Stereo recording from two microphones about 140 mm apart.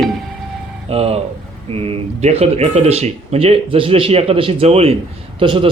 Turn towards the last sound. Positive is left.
turn(degrees=-40)  # may be behind; listen again after turning